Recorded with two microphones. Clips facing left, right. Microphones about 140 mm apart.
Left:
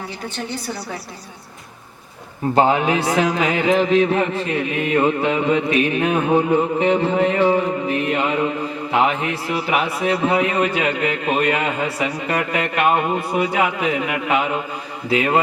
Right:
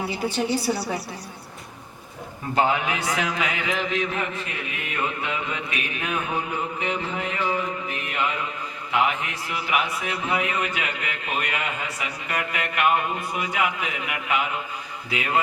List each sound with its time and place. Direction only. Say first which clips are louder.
0.0 s a woman's voice: right 4 dB; 10° right (ahead or behind)
2.6 s a man's voice: left 6 dB; 35° left (ahead or behind)
7.1 s music: left 11 dB; 30° left (ahead or behind)
7.9 s a man's voice: left 8 dB; 30° left (ahead or behind)